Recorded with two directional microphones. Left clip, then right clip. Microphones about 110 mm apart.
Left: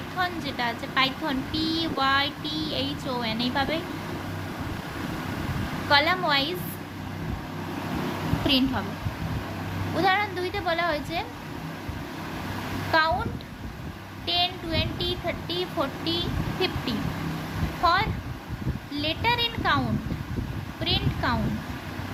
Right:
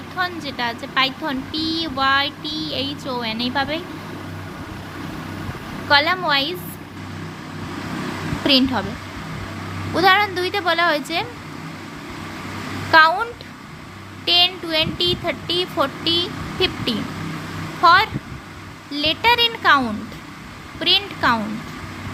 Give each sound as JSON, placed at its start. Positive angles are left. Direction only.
{"t": 0.2, "sound": "a woman's voice", "side_deg": -25}
{"t": 5.9, "sound": "a woman's voice", "side_deg": -25}
{"t": 8.4, "sound": "a woman's voice", "side_deg": -30}
{"t": 9.9, "sound": "speech", "side_deg": -40}
{"t": 12.9, "sound": "speech", "side_deg": -40}
{"t": 14.3, "sound": "speech", "side_deg": -35}
{"t": 20.8, "sound": "speech", "side_deg": -40}